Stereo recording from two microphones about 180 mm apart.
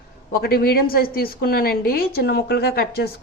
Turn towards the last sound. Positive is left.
turn(degrees=60)  # may be behind; listen again after turning